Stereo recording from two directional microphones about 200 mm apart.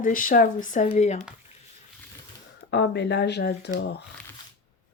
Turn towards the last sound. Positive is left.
turn(degrees=55)  # may be behind; listen again after turning